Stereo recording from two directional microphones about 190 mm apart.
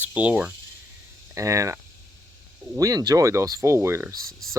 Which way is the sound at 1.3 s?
15° right (ahead or behind).